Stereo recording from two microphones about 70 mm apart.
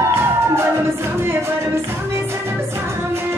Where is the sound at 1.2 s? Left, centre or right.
Right.